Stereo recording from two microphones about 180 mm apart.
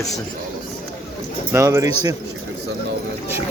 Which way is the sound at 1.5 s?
15° right (ahead or behind).